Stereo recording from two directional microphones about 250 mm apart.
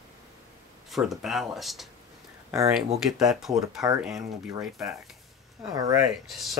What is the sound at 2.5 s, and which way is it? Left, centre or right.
Speech, centre.